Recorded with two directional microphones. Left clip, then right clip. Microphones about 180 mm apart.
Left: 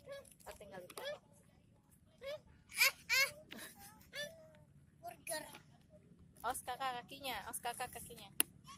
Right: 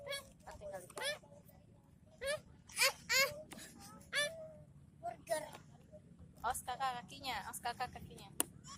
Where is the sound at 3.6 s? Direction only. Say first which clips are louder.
Left 1 dB; 35° left (ahead or behind).